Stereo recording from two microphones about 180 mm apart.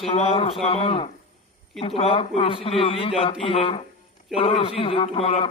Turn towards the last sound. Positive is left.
turn(degrees=30)  # may be behind; listen again after turning